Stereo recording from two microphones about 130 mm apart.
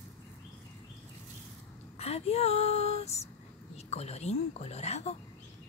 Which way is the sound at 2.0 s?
55° left (ahead or behind).